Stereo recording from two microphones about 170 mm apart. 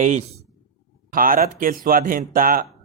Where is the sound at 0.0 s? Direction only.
45° right (ahead or behind).